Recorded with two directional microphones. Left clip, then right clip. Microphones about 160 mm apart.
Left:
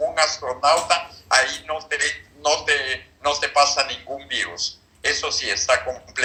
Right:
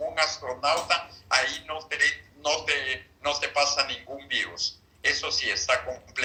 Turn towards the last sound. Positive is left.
turn(degrees=20)  # may be behind; listen again after turning